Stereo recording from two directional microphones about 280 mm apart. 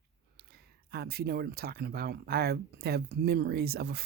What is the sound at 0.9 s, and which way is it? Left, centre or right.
Speech, right.